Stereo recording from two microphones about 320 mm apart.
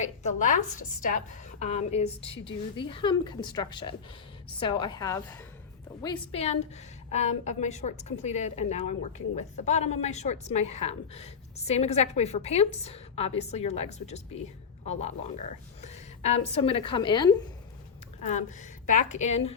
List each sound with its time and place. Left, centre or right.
0.0 s a woman's voice: left